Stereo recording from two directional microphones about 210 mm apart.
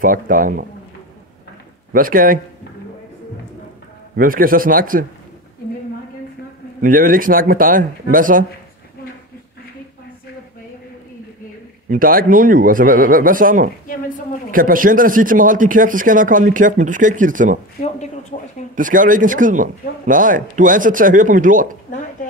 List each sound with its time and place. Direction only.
0.0 s speech: 40° right (ahead or behind)
1.9 s speech: 40° right (ahead or behind)
4.2 s speech: 40° right (ahead or behind)
6.8 s speech: 40° right (ahead or behind)
11.9 s speech: 40° right (ahead or behind)
13.8 s a woman's voice: 40° left (ahead or behind)
14.5 s speech: 40° right (ahead or behind)
18.3 s a woman's voice: 30° left (ahead or behind)
18.8 s speech: 40° right (ahead or behind)